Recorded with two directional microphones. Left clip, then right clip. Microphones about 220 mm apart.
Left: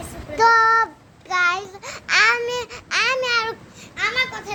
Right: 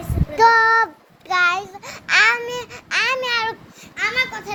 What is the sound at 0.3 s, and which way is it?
Child singing, 10° right (ahead or behind).